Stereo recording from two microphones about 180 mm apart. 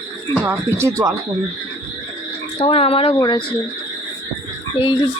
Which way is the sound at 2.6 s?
35° left (ahead or behind).